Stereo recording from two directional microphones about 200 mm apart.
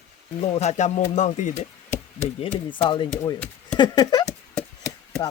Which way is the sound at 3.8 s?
20° left (ahead or behind).